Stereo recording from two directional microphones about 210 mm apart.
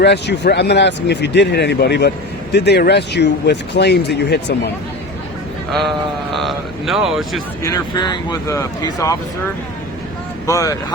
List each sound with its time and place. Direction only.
0.0 s speech: 55° left (ahead or behind)
6.3 s speech: centre (ahead or behind)
7.6 s speech: 20° left (ahead or behind)
10.4 s speech: 15° left (ahead or behind)